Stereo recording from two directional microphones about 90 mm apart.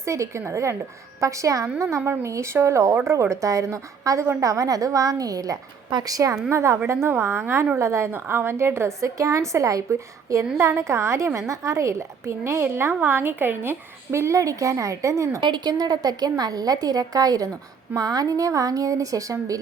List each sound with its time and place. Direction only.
0.0 s a woman's voice: 30° right (ahead or behind)
15.4 s a woman's voice: 60° right (ahead or behind); by 19.5 s 40° right (ahead or behind)